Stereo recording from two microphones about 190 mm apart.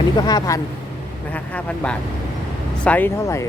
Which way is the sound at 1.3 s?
5° left (ahead or behind).